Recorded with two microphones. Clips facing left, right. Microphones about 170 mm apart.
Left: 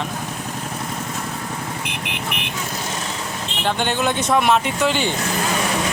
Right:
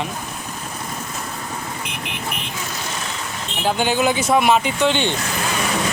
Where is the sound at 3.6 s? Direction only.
5° right (ahead or behind).